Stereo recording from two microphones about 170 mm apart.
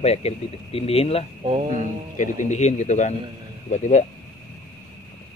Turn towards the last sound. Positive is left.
turn(degrees=45)  # may be behind; listen again after turning